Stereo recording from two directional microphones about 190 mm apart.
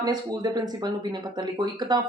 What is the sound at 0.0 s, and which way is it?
Speech, 20° right (ahead or behind).